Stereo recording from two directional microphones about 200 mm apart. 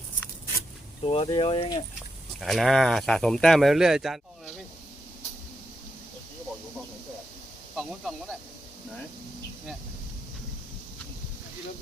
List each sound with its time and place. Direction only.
1.0 s speech: 30° left (ahead or behind)
2.4 s speech: centre (ahead or behind)
7.8 s speech: centre (ahead or behind)